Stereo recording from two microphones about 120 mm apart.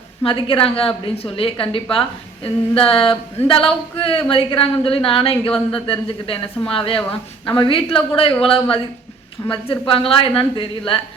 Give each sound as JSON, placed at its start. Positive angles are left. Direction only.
{"t": 0.3, "sound": "a woman's voice", "side_deg": 50}